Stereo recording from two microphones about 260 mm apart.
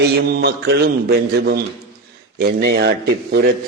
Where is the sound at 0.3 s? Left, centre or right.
Right.